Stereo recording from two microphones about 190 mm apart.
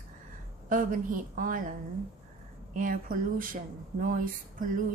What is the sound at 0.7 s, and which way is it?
Speech, 45° right (ahead or behind).